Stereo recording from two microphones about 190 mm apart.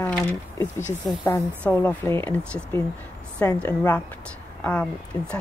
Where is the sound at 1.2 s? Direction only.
10° left (ahead or behind).